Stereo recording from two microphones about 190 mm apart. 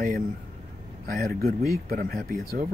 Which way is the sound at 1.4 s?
50° right (ahead or behind).